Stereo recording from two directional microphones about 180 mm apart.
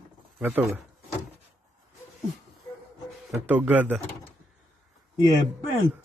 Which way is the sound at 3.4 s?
10° right (ahead or behind).